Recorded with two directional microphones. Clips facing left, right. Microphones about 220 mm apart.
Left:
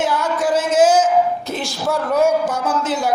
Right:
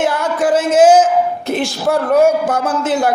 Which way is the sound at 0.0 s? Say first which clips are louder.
Right 3 dB; 55° right (ahead or behind).